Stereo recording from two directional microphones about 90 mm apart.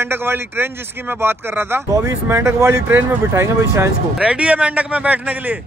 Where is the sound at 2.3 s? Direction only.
35° right (ahead or behind).